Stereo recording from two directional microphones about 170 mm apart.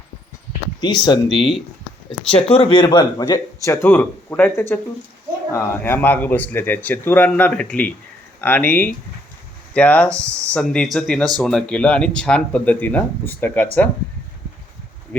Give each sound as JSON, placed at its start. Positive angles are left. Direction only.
{"t": 0.8, "sound": "speech", "side_deg": 25}
{"t": 10.2, "sound": "speech", "side_deg": -15}
{"t": 10.5, "sound": "speech", "side_deg": 5}